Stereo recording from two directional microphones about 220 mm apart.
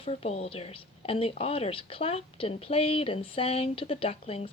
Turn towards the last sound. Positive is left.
turn(degrees=25)  # may be behind; listen again after turning